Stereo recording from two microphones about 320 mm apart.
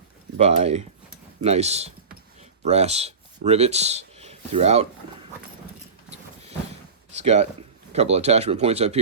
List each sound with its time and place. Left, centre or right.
0.3 s speech: centre
6.1 s a sound: centre
7.2 s speech: right